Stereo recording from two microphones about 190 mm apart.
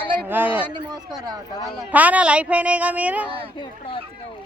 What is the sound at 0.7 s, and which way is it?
Speech, 20° right (ahead or behind).